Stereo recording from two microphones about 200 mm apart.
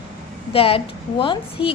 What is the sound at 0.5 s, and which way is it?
Speech, 30° left (ahead or behind).